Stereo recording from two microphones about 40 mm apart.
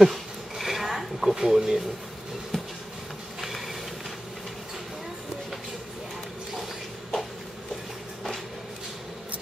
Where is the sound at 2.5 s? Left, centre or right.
Centre.